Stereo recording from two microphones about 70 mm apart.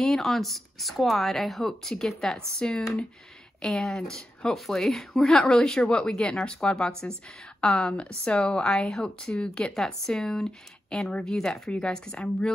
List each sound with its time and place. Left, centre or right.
0.0 s speech: centre